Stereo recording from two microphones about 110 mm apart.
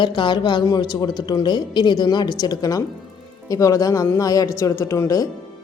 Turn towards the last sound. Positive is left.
turn(degrees=30)  # may be behind; listen again after turning